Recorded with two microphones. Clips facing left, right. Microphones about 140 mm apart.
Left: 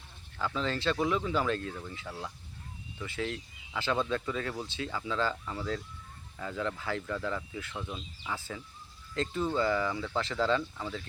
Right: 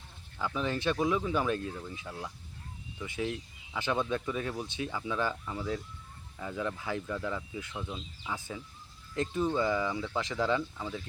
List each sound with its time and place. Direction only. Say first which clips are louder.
0.3 s speech: even; 15° right (ahead or behind)
8.4 s speech: even; 20° right (ahead or behind)